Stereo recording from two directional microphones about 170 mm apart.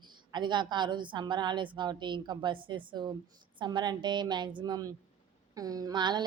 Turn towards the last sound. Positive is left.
turn(degrees=-25)  # may be behind; listen again after turning